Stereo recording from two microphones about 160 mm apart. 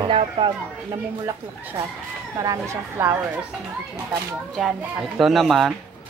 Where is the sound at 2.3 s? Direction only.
20° right (ahead or behind).